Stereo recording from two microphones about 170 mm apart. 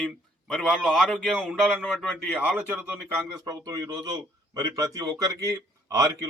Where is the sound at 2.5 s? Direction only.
5° right (ahead or behind).